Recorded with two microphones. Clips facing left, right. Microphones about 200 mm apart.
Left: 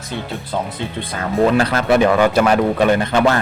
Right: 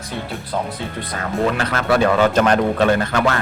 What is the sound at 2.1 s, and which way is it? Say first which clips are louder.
A man's voice: left 1 dB; 10° left (ahead or behind).